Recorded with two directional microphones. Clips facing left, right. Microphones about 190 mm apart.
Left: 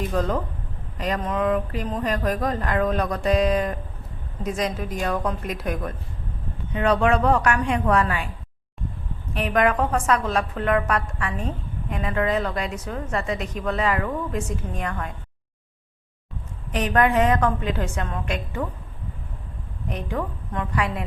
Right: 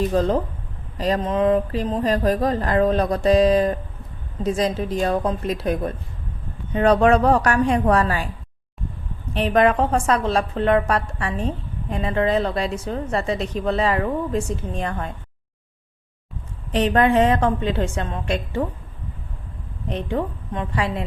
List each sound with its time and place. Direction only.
0.1 s a woman's voice: 30° right (ahead or behind)
9.3 s a woman's voice: 30° right (ahead or behind)
16.7 s a woman's voice: 30° right (ahead or behind)
19.9 s a woman's voice: 25° right (ahead or behind)